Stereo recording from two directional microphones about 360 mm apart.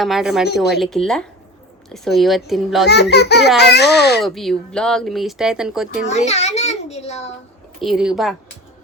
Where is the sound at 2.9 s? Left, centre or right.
Left.